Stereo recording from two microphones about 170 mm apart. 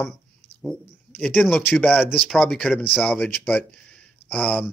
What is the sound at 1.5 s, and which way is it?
Speech, 10° left (ahead or behind).